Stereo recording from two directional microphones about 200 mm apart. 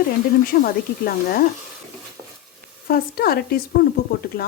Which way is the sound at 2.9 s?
50° left (ahead or behind).